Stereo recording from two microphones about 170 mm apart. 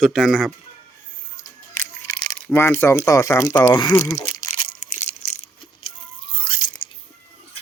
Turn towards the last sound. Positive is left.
turn(degrees=30)  # may be behind; listen again after turning